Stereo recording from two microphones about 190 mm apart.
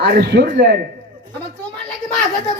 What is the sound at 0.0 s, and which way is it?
Speech, 60° right (ahead or behind).